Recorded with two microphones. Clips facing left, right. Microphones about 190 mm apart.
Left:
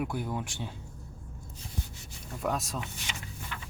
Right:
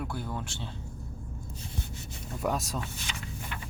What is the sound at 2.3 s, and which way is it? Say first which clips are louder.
Speech: right 1 dB; centre (ahead or behind).